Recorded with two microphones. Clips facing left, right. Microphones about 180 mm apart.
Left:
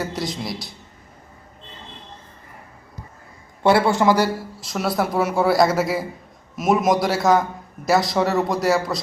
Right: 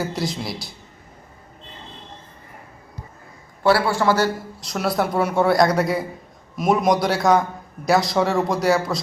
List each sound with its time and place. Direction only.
0.0 s a man's voice: centre (ahead or behind)
3.6 s a man's voice: 20° left (ahead or behind)
4.6 s a man's voice: centre (ahead or behind)